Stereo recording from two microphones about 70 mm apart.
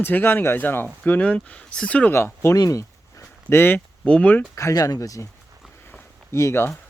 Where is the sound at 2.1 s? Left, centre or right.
Left.